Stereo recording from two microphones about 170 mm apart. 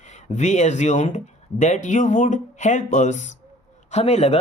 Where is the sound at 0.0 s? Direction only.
45° left (ahead or behind).